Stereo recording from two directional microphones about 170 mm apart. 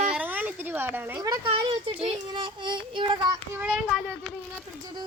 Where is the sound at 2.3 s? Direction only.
30° right (ahead or behind).